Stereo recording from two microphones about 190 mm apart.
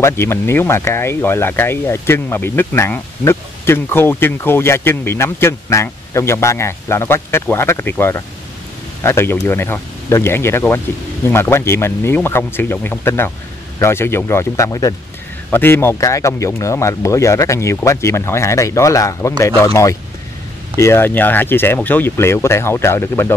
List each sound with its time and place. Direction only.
0.0 s speech: 15° left (ahead or behind)